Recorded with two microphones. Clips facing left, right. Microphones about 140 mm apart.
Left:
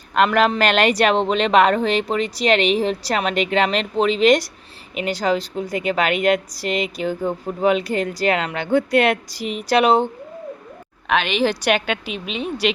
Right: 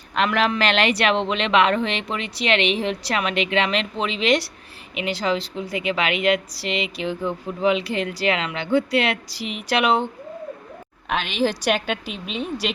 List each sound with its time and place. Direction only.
0.1 s a woman's voice: 45° left (ahead or behind)
11.1 s speech: 75° left (ahead or behind)